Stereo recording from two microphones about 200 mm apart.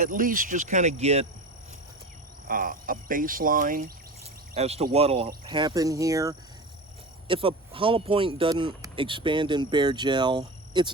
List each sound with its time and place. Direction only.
0.0 s speech: 45° right (ahead or behind)
2.5 s speech: 45° right (ahead or behind)
4.5 s speech: 30° right (ahead or behind)
7.3 s speech: 25° right (ahead or behind)